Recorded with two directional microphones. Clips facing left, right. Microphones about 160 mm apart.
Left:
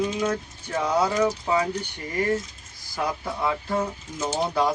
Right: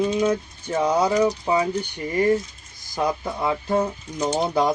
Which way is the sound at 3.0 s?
20° right (ahead or behind).